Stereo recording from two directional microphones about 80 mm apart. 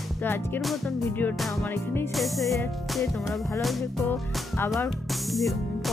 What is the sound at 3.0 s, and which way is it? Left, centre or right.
Music, left.